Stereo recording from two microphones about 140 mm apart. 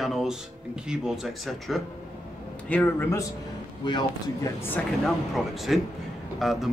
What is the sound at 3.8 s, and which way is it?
Speech, 35° left (ahead or behind).